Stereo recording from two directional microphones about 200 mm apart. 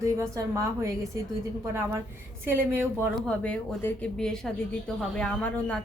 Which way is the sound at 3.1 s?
5° left (ahead or behind).